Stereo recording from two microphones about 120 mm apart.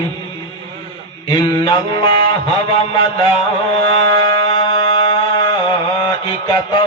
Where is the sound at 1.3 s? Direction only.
35° left (ahead or behind).